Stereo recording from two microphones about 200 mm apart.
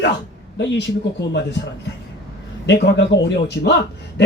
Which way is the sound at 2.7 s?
60° left (ahead or behind).